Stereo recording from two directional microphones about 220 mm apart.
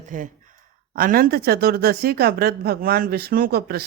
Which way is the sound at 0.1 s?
35° right (ahead or behind).